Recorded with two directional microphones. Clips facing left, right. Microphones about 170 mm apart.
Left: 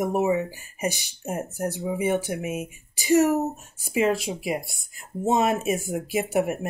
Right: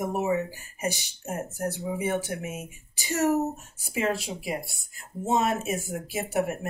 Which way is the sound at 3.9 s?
15° left (ahead or behind).